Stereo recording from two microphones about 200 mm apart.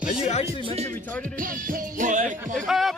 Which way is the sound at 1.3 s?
45° right (ahead or behind).